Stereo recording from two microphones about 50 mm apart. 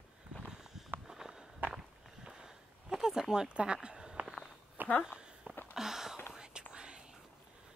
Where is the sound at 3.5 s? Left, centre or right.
Right.